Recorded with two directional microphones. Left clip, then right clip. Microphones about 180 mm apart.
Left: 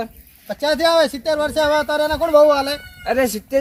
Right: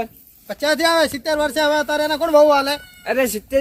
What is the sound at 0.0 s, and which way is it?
Speech, centre (ahead or behind).